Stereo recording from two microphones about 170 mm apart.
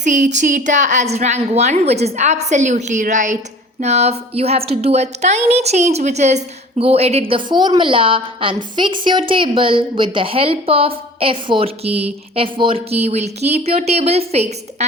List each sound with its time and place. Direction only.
0.0 s a woman's voice: 45° right (ahead or behind)